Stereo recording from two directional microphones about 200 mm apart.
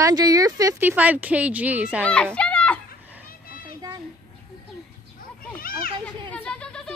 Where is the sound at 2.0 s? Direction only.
5° left (ahead or behind).